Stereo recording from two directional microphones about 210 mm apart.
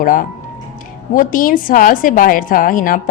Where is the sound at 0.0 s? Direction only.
40° left (ahead or behind).